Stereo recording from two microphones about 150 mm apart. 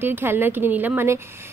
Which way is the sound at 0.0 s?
15° right (ahead or behind).